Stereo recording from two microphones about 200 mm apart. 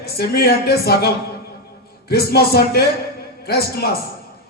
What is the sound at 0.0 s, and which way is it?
A man's voice, 50° left (ahead or behind).